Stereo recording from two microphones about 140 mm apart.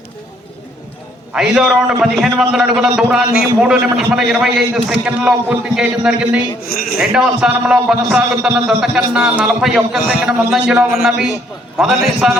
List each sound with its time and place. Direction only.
1.3 s a man's voice: 5° right (ahead or behind)
6.6 s speech: 90° left
7.1 s a man's voice: 5° right (ahead or behind)